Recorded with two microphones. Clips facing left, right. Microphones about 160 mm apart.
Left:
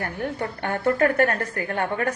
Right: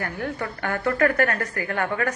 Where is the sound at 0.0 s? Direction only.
20° left (ahead or behind).